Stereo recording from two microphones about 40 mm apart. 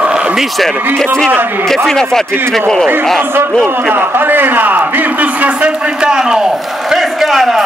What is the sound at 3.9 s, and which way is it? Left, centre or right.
A man's voice, right.